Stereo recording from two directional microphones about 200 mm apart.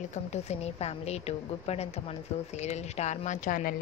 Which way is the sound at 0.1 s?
35° left (ahead or behind).